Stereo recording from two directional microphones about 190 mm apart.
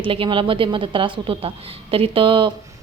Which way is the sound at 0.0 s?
25° right (ahead or behind).